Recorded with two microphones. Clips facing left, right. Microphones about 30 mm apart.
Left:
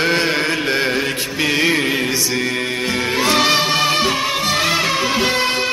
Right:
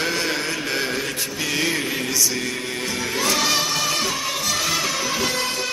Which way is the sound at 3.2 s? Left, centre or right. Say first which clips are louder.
Left 6 dB; left.